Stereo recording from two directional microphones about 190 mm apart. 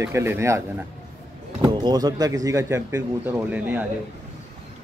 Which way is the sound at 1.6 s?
20° right (ahead or behind).